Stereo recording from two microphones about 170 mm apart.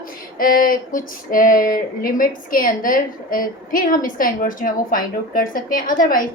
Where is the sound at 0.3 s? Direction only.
55° left (ahead or behind).